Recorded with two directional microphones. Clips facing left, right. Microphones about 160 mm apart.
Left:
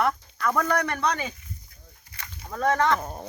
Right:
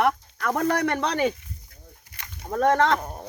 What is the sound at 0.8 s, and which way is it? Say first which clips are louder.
Speech: right 4 dB; 90° right.